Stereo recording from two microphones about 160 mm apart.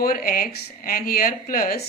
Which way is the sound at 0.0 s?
65° left (ahead or behind).